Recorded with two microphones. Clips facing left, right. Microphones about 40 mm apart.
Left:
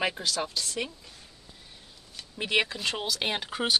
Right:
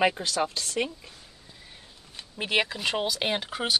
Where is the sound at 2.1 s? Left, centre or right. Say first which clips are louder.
Right 1 dB; centre.